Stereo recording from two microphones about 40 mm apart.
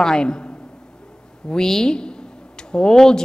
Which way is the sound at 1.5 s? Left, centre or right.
Centre.